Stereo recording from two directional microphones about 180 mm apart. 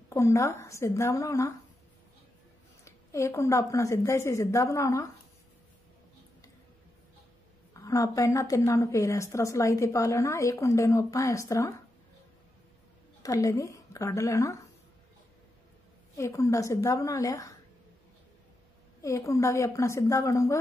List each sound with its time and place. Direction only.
0.1 s a woman's voice: 15° left (ahead or behind)
2.8 s a woman's voice: 15° left (ahead or behind)
7.7 s a woman's voice: 20° left (ahead or behind)
13.2 s speech: 20° left (ahead or behind)
16.2 s a woman's voice: 15° left (ahead or behind)
18.9 s a woman's voice: 15° left (ahead or behind)